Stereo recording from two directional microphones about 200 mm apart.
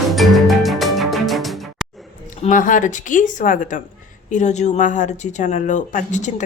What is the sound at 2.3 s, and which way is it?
Speech, 40° left (ahead or behind).